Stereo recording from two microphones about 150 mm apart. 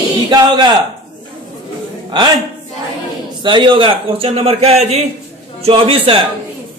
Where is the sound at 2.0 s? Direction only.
30° right (ahead or behind).